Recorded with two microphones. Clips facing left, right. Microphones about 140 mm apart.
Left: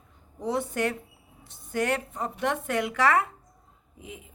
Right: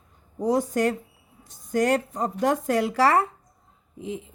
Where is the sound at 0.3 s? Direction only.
40° right (ahead or behind).